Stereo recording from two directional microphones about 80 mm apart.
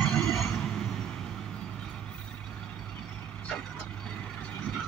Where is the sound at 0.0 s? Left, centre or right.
Centre.